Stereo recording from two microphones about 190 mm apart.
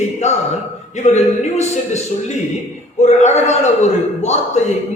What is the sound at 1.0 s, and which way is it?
Speech, 40° left (ahead or behind).